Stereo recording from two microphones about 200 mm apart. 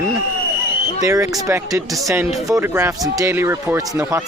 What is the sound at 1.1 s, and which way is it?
Speech, 15° right (ahead or behind).